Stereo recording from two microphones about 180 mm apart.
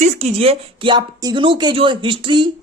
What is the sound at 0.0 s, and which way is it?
Speech, 35° right (ahead or behind).